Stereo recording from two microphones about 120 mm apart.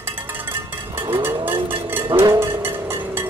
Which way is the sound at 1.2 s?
20° right (ahead or behind).